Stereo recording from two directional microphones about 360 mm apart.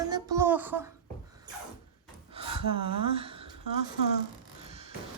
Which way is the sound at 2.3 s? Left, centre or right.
Centre.